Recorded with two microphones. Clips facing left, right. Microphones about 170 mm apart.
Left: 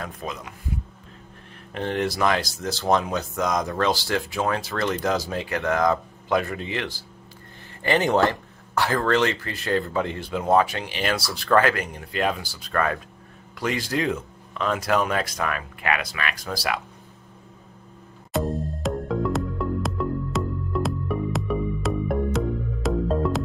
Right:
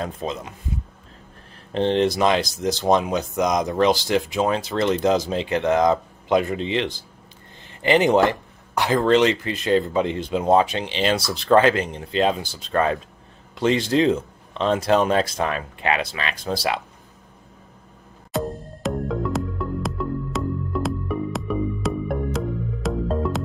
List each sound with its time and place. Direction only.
0.0 s speech: 25° right (ahead or behind)
1.7 s speech: 25° right (ahead or behind)
18.3 s music: centre (ahead or behind)